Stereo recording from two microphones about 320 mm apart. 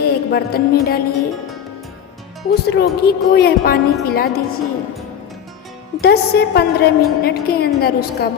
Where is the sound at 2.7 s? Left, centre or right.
Left.